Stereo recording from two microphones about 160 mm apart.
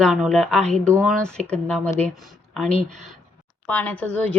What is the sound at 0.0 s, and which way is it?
A woman's voice, centre (ahead or behind).